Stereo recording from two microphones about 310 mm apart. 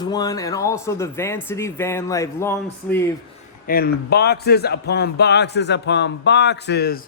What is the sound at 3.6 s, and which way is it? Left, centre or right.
A man's voice, left.